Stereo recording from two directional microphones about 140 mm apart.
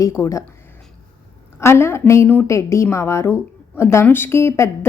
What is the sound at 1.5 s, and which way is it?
A woman's voice, 20° left (ahead or behind).